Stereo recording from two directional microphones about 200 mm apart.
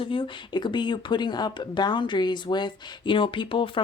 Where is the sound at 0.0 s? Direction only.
25° left (ahead or behind).